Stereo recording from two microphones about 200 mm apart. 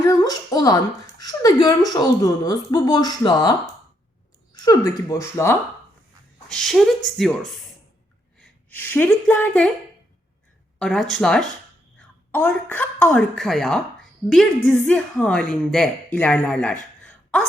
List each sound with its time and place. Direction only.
0.0 s a woman's voice: 20° left (ahead or behind)
4.5 s speech: 20° left (ahead or behind)
6.5 s a woman's voice: centre (ahead or behind)
8.4 s speech: 10° left (ahead or behind)
10.8 s a woman's voice: centre (ahead or behind)